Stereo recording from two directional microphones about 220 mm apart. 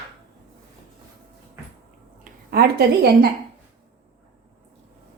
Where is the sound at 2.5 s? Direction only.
45° right (ahead or behind).